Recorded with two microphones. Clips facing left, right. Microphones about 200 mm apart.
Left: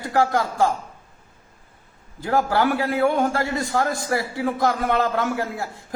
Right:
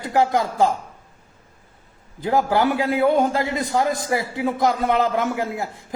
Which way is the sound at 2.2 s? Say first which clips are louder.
Right 1 dB; 20° right (ahead or behind).